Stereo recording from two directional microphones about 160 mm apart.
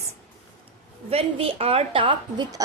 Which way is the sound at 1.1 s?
40° right (ahead or behind).